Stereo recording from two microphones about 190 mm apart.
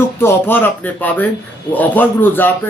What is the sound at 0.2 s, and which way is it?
A man's voice, 10° left (ahead or behind).